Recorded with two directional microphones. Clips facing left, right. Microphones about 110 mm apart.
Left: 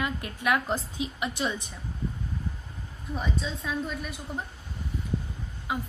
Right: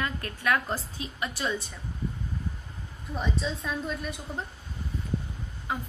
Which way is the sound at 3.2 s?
Centre (ahead or behind).